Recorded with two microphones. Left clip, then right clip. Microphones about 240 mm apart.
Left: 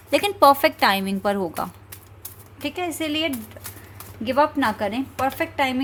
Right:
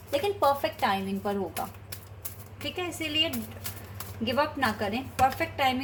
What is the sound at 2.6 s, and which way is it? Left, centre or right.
Speech, left.